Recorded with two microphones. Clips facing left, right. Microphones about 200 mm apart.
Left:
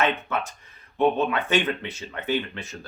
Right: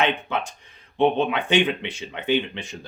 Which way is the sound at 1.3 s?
15° right (ahead or behind).